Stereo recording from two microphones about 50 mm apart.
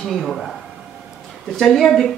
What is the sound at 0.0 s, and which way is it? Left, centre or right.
A woman's voice, centre.